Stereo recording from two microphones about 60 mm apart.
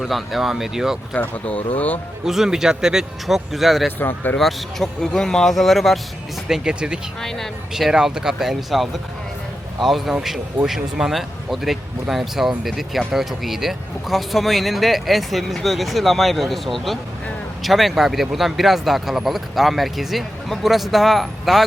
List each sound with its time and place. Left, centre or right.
0.0 s speech: centre
1.1 s speech: left
2.2 s speech: centre
3.9 s speech: left
4.4 s speech: centre
6.5 s speech: centre
7.2 s speech: centre
7.7 s speech: centre